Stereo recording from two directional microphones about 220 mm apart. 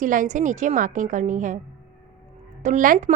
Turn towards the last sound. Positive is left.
turn(degrees=-35)  # may be behind; listen again after turning